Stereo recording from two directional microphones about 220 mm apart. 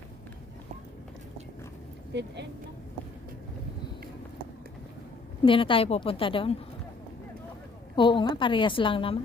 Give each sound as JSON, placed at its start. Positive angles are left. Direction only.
{"t": 2.1, "sound": "speech", "side_deg": -50}
{"t": 5.4, "sound": "a woman's voice", "side_deg": 25}
{"t": 7.9, "sound": "a woman's voice", "side_deg": 20}